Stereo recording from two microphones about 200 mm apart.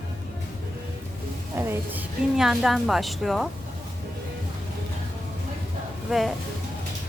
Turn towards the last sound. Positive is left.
turn(degrees=0)  # may be behind; listen again after turning